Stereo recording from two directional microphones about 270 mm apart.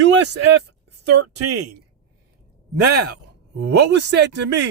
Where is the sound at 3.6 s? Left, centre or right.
Right.